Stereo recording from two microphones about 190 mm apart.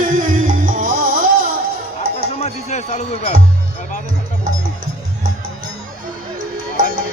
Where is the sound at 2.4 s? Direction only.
35° left (ahead or behind).